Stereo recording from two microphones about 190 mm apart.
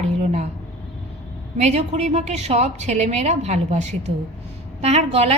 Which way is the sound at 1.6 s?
35° right (ahead or behind).